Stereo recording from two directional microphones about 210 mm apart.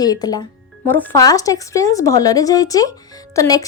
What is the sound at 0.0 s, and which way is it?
A woman's voice, 20° left (ahead or behind).